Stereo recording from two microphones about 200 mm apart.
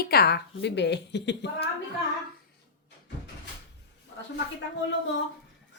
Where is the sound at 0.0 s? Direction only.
50° left (ahead or behind).